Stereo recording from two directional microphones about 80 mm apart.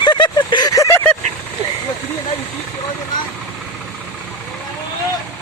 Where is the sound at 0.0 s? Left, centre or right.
Left.